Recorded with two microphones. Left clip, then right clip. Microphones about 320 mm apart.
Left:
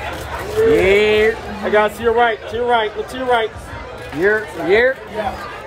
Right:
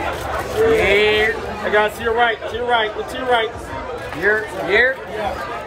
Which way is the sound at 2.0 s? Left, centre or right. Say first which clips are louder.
Left 2 dB; left.